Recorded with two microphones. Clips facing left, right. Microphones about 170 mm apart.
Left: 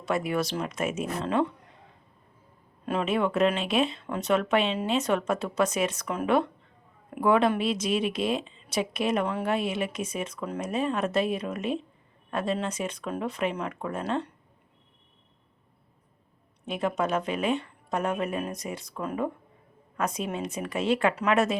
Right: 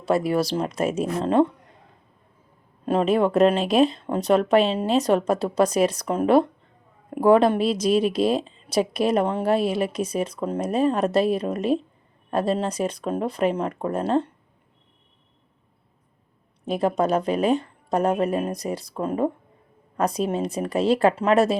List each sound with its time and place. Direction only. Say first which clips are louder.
0.0 s speech: right 6 dB; 35° right (ahead or behind)
2.8 s speech: right 6 dB; 35° right (ahead or behind)
16.6 s speech: right 6 dB; 35° right (ahead or behind)